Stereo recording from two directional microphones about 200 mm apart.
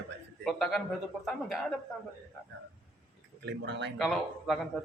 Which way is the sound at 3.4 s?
60° right (ahead or behind).